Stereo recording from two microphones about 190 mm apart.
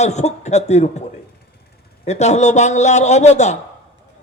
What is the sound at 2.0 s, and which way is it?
A man's voice, 35° left (ahead or behind).